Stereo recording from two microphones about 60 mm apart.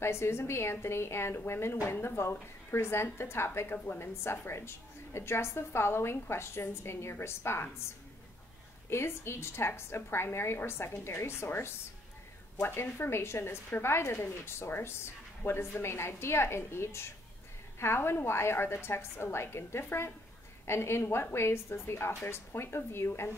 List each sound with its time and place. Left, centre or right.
0.0 s a woman's voice: left
8.9 s a woman's voice: left